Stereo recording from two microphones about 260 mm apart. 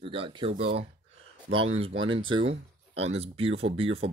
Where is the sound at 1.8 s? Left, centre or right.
Right.